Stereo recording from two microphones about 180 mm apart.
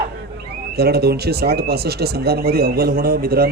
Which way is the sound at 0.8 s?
60° right (ahead or behind).